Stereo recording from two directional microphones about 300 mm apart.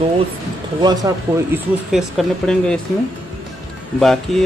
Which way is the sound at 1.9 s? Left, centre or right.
Centre.